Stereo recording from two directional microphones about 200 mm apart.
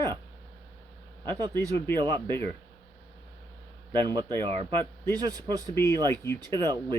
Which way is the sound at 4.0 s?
20° right (ahead or behind).